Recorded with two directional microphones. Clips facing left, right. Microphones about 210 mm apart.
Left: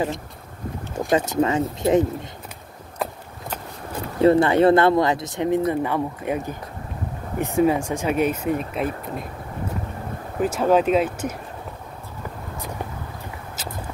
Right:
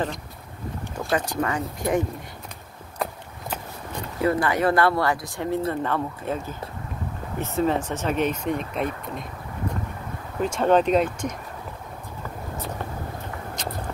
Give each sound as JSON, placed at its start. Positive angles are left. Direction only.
{"t": 0.9, "sound": "speech", "side_deg": 25}
{"t": 4.2, "sound": "speech", "side_deg": 25}
{"t": 10.4, "sound": "speech", "side_deg": 5}
{"t": 13.6, "sound": "a sound", "side_deg": 5}